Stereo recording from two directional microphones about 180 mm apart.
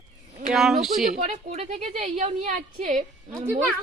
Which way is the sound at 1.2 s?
40° right (ahead or behind).